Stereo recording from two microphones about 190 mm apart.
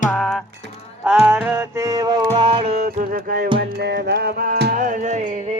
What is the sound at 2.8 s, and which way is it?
Music, 50° right (ahead or behind).